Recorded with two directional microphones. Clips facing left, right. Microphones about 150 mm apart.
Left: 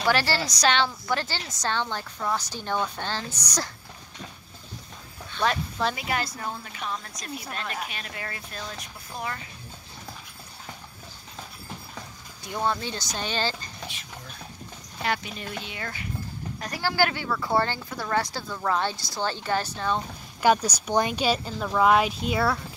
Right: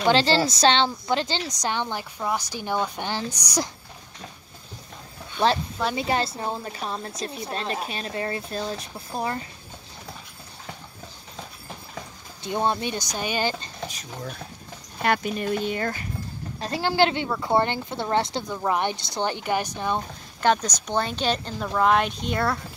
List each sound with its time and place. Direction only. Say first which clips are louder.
0.0 s a woman's voice: right 5 dB; 20° right (ahead or behind)
5.4 s a woman's voice: right 3 dB; 25° right (ahead or behind)
12.4 s a woman's voice: right 3 dB; 25° right (ahead or behind)
13.8 s speech: right 6 dB; 40° right (ahead or behind)
16.5 s a woman's voice: right 4 dB; 25° right (ahead or behind)
20.4 s speech: left 1 dB; 10° left (ahead or behind)